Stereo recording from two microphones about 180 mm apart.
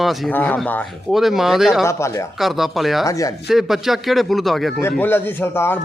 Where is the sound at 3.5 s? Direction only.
Centre (ahead or behind).